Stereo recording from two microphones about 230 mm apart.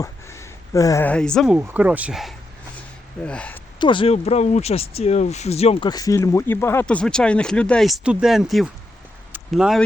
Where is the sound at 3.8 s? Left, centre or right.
Left.